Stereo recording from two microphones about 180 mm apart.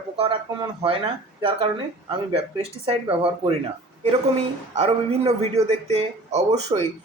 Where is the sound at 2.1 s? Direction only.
30° right (ahead or behind).